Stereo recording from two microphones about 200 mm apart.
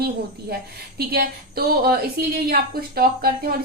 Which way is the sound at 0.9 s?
50° right (ahead or behind).